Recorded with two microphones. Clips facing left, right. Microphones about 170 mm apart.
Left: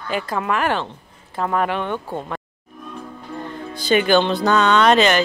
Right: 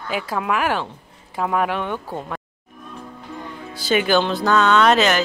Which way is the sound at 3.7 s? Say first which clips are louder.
Left 2 dB; 5° right (ahead or behind).